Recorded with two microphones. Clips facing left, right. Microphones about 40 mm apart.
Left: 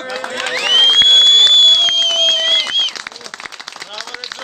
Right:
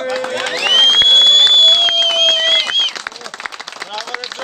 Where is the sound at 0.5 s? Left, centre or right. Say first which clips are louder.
Even; centre.